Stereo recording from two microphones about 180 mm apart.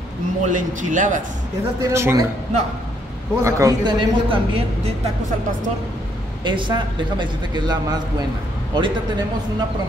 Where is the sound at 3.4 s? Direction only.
15° right (ahead or behind).